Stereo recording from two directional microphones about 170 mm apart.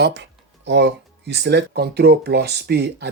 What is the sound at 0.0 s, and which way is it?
Speech, 90° right.